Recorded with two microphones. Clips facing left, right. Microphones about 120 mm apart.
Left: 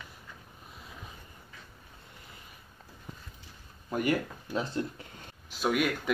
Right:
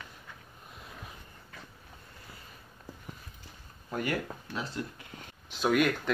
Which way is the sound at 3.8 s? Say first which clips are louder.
Left 4 dB; 15° left (ahead or behind).